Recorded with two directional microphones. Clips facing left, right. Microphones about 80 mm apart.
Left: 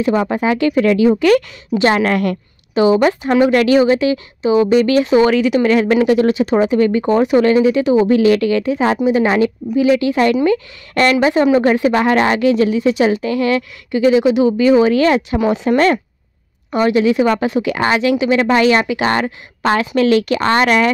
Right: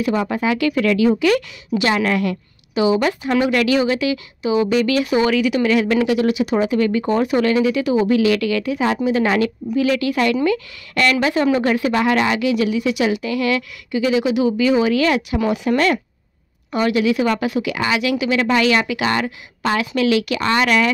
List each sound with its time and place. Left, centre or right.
0.0 s a woman's voice: left
2.7 s a woman's voice: left
18.1 s a woman's voice: left